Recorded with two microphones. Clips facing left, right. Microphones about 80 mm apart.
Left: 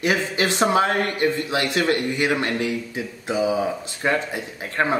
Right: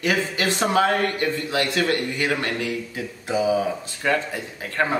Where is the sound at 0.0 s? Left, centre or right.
Left.